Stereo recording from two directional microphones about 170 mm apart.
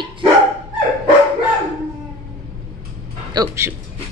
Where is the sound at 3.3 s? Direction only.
15° right (ahead or behind).